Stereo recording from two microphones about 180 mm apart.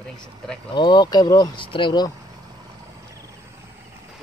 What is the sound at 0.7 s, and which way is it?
Speech, 25° left (ahead or behind).